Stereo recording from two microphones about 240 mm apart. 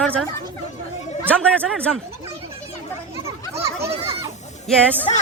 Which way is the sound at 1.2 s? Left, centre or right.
Centre.